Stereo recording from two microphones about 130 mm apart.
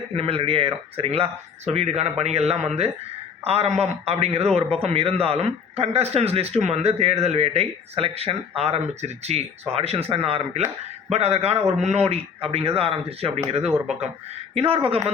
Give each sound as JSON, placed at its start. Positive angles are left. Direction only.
{"t": 0.2, "sound": "a man's voice", "side_deg": -45}